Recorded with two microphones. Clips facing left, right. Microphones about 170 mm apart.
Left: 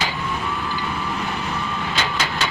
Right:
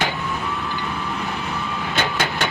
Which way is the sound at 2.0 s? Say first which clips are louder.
Right 3 dB; 55° right (ahead or behind).